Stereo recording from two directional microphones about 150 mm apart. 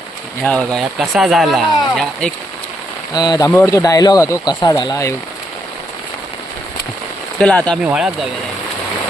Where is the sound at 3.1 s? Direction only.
30° left (ahead or behind).